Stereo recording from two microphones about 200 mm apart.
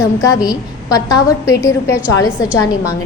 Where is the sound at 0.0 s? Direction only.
15° left (ahead or behind).